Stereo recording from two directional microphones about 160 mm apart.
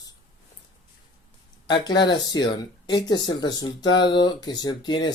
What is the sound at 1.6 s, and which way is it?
Speech, 25° left (ahead or behind).